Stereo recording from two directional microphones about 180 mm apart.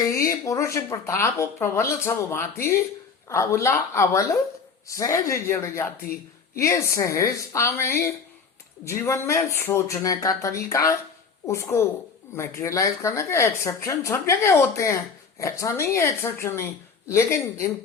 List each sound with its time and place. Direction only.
0.0 s speech: 15° left (ahead or behind)